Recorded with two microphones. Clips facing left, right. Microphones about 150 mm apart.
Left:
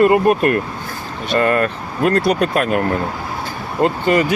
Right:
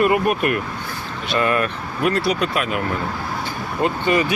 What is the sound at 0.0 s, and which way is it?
Speech, 30° left (ahead or behind).